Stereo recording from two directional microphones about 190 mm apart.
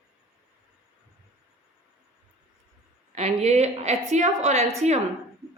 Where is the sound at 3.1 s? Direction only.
35° right (ahead or behind).